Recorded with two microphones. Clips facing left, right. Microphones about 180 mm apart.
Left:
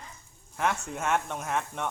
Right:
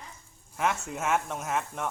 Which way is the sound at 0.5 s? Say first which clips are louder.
Even; centre (ahead or behind).